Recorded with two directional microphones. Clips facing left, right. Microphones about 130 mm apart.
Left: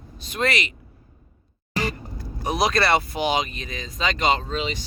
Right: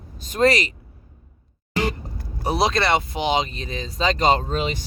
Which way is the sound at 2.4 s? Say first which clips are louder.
Right 1 dB; 30° right (ahead or behind).